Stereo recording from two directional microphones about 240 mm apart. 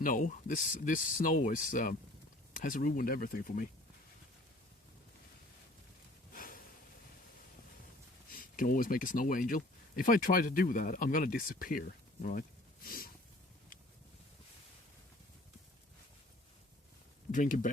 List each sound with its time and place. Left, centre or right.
0.0 s speech: left
6.3 s a sound: left
8.4 s speech: left
17.3 s speech: left